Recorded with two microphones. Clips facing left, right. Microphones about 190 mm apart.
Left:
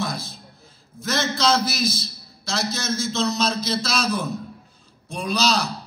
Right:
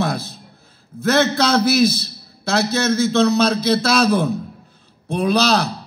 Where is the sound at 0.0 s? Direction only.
65° right (ahead or behind).